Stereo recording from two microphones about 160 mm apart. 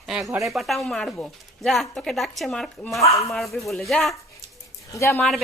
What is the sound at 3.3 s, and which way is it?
Speech, centre (ahead or behind).